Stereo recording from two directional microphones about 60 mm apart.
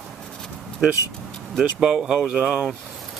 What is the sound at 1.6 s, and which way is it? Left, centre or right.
Speech, centre.